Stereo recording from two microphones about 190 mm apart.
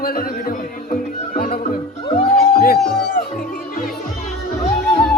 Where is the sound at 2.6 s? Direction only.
50° left (ahead or behind).